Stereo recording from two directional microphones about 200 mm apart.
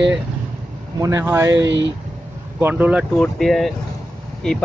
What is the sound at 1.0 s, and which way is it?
Speech, 15° right (ahead or behind).